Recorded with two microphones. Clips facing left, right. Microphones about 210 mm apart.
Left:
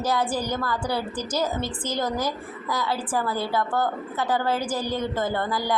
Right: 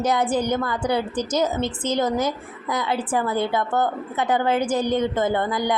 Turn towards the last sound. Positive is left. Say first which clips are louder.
# right 4 dB
turn(degrees=-20)  # may be behind; listen again after turning